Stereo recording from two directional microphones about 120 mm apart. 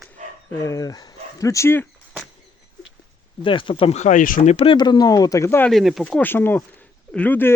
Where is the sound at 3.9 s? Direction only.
85° left.